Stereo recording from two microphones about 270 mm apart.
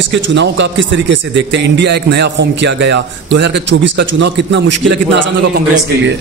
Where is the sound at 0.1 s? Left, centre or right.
Right.